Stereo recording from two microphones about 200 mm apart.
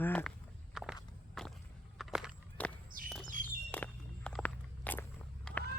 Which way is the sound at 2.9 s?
45° right (ahead or behind).